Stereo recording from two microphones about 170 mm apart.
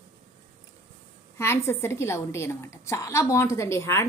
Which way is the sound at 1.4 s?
15° left (ahead or behind).